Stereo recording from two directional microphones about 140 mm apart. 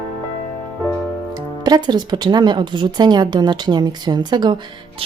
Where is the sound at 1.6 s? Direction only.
30° right (ahead or behind).